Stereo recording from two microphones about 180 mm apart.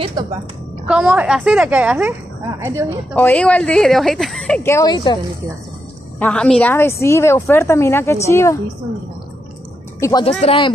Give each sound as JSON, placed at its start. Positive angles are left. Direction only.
{"t": 0.2, "sound": "a woman's voice", "side_deg": -25}
{"t": 0.8, "sound": "a woman's voice", "side_deg": -5}
{"t": 3.2, "sound": "a woman's voice", "side_deg": 10}
{"t": 4.6, "sound": "speech", "side_deg": 20}
{"t": 6.1, "sound": "a woman's voice", "side_deg": 5}
{"t": 9.9, "sound": "speech", "side_deg": 15}
{"t": 10.4, "sound": "speech", "side_deg": 30}